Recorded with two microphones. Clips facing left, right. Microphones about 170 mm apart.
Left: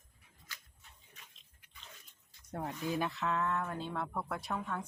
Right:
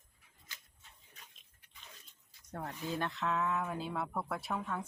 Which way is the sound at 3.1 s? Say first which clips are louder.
Even; centre (ahead or behind).